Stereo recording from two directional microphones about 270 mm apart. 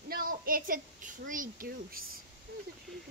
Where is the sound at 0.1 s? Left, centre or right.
Right.